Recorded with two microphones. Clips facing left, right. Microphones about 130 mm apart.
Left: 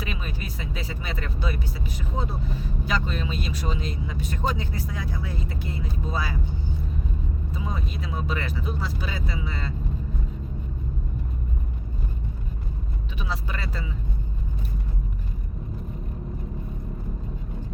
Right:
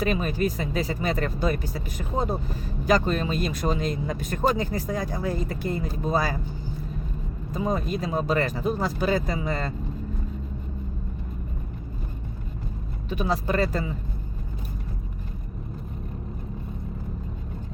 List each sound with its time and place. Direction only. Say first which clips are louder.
0.0 s speech: right 10 dB; 45° right (ahead or behind)
7.5 s speech: right 9 dB; 45° right (ahead or behind)
13.1 s speech: right 9 dB; 45° right (ahead or behind)